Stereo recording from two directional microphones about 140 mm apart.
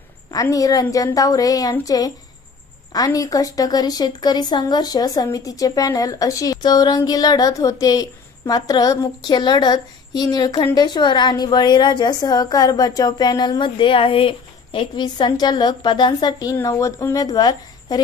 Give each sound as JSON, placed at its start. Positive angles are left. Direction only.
{"t": 0.3, "sound": "a woman's voice", "side_deg": 25}